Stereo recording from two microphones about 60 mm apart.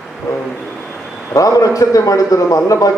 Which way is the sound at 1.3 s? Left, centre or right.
Left.